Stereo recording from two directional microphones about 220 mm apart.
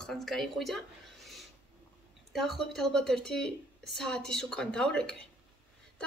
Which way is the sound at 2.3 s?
Centre (ahead or behind).